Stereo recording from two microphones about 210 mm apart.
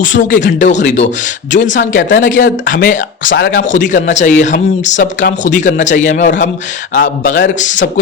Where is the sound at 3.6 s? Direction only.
35° left (ahead or behind).